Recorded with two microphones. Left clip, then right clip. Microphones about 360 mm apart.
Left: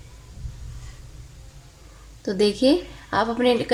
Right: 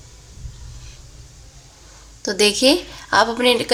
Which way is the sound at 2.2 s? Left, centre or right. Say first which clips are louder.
Right 4 dB; right.